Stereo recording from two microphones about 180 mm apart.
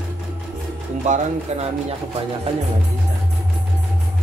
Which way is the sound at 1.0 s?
40° right (ahead or behind).